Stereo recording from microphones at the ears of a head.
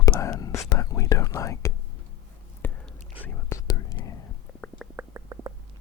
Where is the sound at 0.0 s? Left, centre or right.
Left.